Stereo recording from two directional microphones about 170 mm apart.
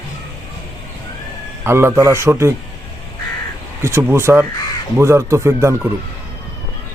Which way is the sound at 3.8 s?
15° right (ahead or behind).